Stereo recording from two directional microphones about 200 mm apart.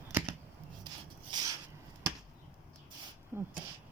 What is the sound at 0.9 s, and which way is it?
Rub, 20° right (ahead or behind).